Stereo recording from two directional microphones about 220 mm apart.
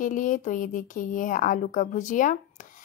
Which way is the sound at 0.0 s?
35° left (ahead or behind).